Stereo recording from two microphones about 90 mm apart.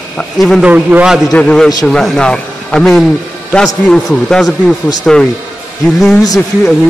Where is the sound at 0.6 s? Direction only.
15° right (ahead or behind).